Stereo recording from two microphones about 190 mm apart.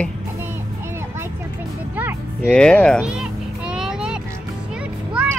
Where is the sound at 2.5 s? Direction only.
5° left (ahead or behind).